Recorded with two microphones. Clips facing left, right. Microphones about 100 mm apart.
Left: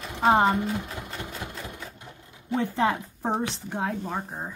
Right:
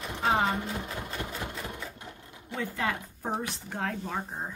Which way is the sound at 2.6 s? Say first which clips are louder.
Left 7 dB; 25° left (ahead or behind).